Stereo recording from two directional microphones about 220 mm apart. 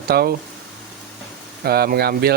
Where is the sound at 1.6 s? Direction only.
45° right (ahead or behind).